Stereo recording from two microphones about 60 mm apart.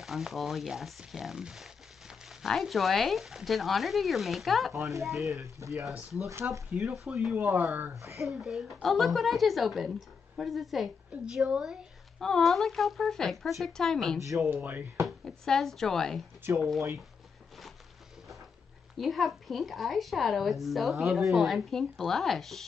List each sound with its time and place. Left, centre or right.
0.0 s a woman's voice: centre
5.4 s speech: right
6.7 s speech: centre
7.3 s speech: right
7.9 s speech: right
8.2 s a woman's voice: centre
12.2 s a woman's voice: centre
14.2 s speech: right
14.5 s speech: right
15.0 s a woman's voice: centre
18.9 s a woman's voice: centre